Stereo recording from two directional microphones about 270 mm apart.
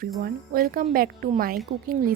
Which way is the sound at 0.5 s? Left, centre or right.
Right.